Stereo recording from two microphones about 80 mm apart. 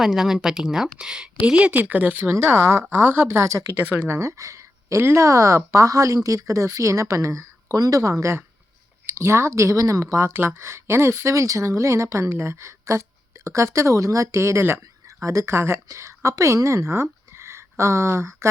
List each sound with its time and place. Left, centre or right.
0.0 s speech: centre; by 2.3 s right
2.3 s speech: right
3.2 s speech: right